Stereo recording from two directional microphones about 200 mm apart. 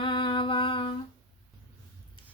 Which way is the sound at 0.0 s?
25° left (ahead or behind).